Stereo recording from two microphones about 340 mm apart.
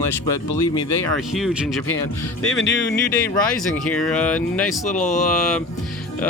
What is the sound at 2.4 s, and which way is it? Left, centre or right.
Music, left.